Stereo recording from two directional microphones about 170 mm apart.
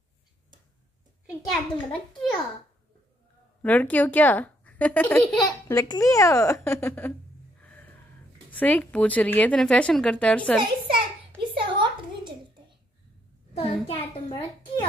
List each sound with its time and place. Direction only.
1.5 s a child's voice: 5° left (ahead or behind)
3.6 s speech: 10° left (ahead or behind)
7.6 s a sound: 10° left (ahead or behind)
8.5 s speech: 10° left (ahead or behind)
11.5 s a sound: 30° right (ahead or behind)
13.6 s a child's voice: 35° left (ahead or behind)